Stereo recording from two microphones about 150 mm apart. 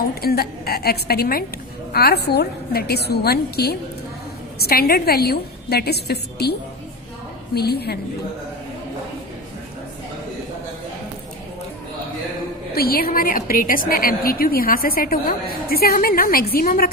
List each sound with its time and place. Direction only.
0.2 s a woman's voice: 90° left
12.7 s a woman's voice: 85° left